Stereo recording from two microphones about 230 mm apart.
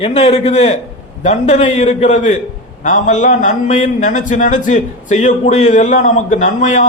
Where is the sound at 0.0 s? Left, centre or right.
Left.